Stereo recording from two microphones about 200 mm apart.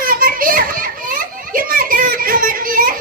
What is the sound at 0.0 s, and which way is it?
Children playing, 45° right (ahead or behind).